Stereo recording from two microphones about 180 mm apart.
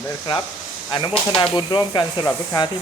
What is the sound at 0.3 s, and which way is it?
Speech, 25° left (ahead or behind).